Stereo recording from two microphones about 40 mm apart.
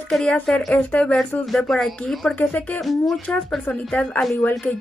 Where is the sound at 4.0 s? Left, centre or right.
Left.